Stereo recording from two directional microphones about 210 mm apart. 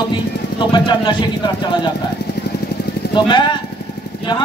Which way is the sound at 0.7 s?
20° left (ahead or behind).